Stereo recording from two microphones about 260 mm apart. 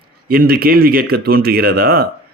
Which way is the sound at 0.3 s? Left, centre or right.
Right.